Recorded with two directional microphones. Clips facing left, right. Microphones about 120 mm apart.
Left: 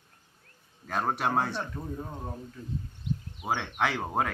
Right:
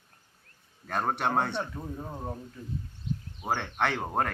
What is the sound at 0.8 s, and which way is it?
Speech, centre (ahead or behind).